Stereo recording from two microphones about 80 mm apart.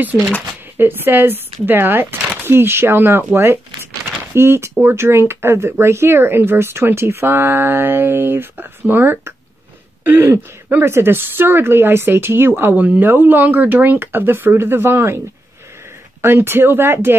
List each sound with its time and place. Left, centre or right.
0.7 s speech: right
4.3 s speech: right